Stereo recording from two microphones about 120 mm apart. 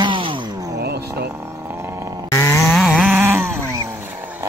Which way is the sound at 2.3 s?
25° left (ahead or behind).